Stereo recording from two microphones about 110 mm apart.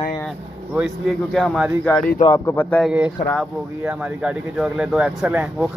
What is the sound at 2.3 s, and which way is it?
Speech, 25° left (ahead or behind).